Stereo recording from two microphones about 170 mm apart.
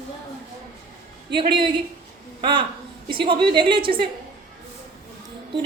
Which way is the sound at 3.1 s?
30° right (ahead or behind).